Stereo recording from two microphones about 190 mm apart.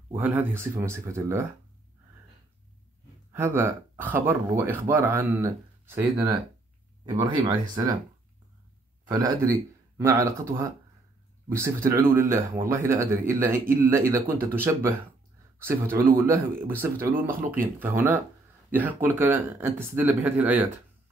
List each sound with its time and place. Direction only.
0.1 s speech: 10° right (ahead or behind)
3.3 s speech: 15° right (ahead or behind)
9.1 s speech: 20° right (ahead or behind)